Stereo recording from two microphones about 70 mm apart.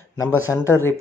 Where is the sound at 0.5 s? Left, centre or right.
Left.